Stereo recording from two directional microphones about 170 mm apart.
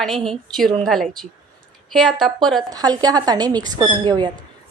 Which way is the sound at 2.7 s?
25° right (ahead or behind).